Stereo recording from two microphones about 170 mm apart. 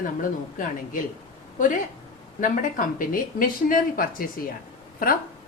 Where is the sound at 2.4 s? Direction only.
50° left (ahead or behind).